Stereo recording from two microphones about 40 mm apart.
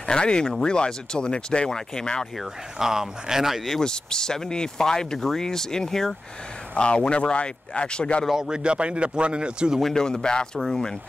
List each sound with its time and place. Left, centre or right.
0.1 s speech: left
2.8 s speech: centre
3.8 s speech: centre
6.7 s speech: left
8.3 s speech: centre
9.9 s speech: centre